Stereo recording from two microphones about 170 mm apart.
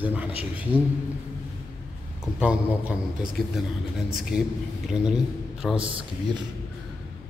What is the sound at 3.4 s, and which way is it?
A man's voice, centre (ahead or behind).